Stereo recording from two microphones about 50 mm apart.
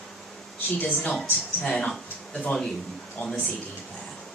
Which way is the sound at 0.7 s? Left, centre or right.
Left.